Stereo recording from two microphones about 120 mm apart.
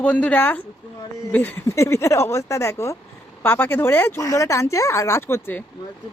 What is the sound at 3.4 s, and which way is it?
Speech, 15° left (ahead or behind).